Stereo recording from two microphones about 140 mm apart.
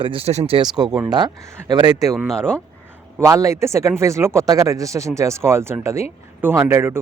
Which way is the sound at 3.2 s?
20° right (ahead or behind).